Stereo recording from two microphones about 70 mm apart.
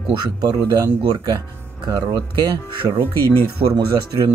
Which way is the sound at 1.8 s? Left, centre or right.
Right.